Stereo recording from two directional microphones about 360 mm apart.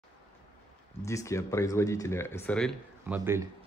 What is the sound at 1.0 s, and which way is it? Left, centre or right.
A man's voice, centre.